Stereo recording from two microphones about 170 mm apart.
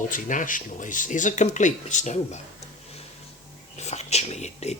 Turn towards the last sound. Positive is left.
turn(degrees=40)  # may be behind; listen again after turning